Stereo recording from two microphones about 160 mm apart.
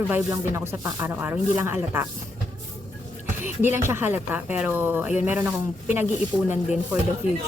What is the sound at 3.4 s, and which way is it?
Speech, 15° right (ahead or behind).